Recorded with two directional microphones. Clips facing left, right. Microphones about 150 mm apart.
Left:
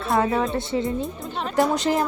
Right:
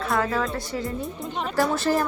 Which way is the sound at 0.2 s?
25° left (ahead or behind).